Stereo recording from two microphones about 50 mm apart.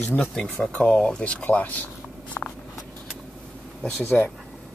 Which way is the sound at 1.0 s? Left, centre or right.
Centre.